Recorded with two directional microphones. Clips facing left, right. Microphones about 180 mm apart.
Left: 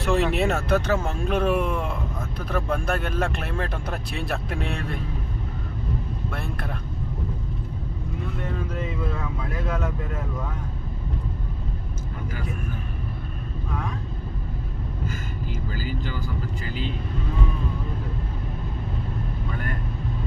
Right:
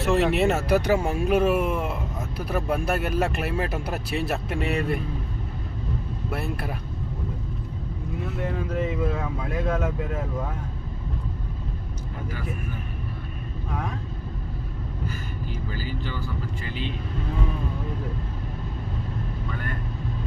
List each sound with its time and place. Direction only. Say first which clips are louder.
0.0 s speech: right 1 dB; centre (ahead or behind)
6.3 s speech: right 5 dB; 5° right (ahead or behind)
9.2 s speech: right 3 dB; 30° right (ahead or behind)
16.6 s speech: left 1 dB; 40° left (ahead or behind)